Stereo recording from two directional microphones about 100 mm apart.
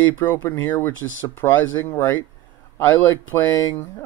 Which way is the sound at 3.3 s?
25° left (ahead or behind).